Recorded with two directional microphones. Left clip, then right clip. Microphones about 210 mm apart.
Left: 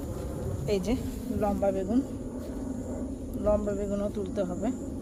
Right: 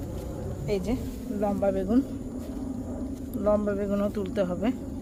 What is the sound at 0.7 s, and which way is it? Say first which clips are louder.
Speech: even; 5° left (ahead or behind).